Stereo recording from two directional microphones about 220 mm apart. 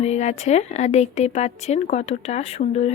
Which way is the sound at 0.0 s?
30° left (ahead or behind).